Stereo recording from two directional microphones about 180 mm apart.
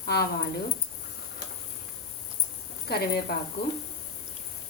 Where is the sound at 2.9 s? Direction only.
60° left (ahead or behind).